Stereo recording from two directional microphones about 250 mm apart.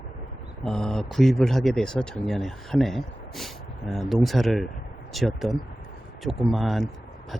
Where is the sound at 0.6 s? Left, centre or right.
Centre.